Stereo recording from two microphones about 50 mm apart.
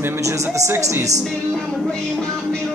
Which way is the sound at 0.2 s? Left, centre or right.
Right.